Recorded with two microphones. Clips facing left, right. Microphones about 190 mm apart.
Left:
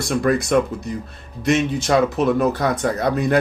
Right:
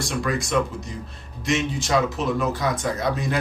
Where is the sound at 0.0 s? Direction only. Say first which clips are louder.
Left 7 dB; 60° left (ahead or behind).